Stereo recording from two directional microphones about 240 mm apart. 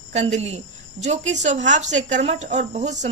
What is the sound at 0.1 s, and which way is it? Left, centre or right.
Speech, right.